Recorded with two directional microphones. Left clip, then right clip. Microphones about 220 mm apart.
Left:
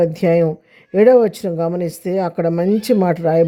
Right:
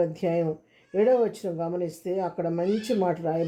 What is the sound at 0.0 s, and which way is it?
A woman's voice, 45° left (ahead or behind).